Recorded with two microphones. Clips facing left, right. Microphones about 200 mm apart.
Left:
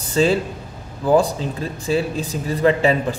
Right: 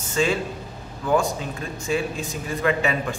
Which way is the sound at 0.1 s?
35° left (ahead or behind).